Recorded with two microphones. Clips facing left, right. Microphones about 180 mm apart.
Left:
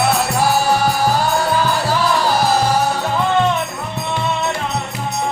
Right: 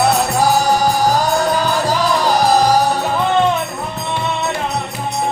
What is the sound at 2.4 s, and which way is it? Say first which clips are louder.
Music: right 3 dB; 40° right (ahead or behind).